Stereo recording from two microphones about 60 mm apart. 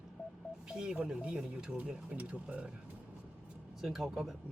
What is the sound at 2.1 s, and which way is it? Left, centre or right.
Speech, right.